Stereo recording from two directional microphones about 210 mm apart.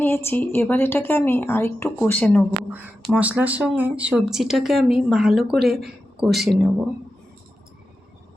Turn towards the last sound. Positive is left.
turn(degrees=0)  # may be behind; listen again after turning